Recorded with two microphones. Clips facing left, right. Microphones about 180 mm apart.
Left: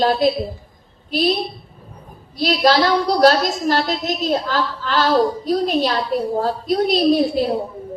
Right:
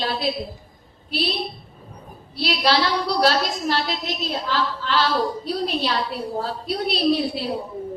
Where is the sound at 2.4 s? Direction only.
45° left (ahead or behind).